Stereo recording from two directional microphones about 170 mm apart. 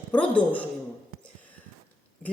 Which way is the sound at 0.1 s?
10° left (ahead or behind).